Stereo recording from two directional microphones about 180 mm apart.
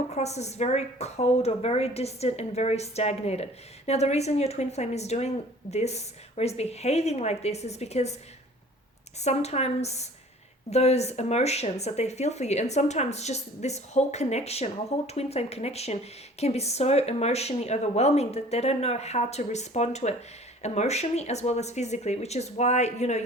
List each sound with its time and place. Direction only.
0.1 s speech: 35° left (ahead or behind)
9.2 s speech: 35° left (ahead or behind)